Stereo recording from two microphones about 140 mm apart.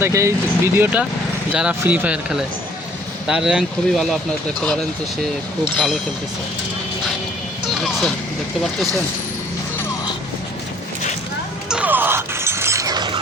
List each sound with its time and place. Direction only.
0.0 s speech: 20° right (ahead or behind); by 4.2 s 5° right (ahead or behind)
5.7 s speech: centre (ahead or behind)
7.7 s speech: centre (ahead or behind)
11.7 s shatter: 10° right (ahead or behind); by 13.1 s 30° right (ahead or behind)